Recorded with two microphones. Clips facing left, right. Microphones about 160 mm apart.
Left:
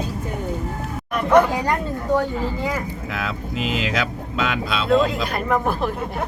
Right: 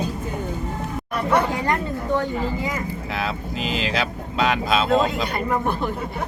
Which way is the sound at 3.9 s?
40° right (ahead or behind).